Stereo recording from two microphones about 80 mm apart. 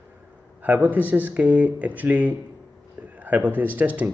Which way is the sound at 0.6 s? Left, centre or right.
Right.